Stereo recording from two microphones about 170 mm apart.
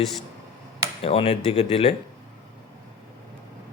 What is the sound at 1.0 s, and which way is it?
Speech, 35° left (ahead or behind).